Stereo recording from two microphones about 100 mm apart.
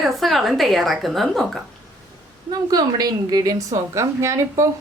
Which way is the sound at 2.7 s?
40° right (ahead or behind).